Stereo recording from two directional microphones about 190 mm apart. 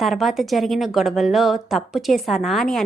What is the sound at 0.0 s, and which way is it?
A woman's voice, centre (ahead or behind).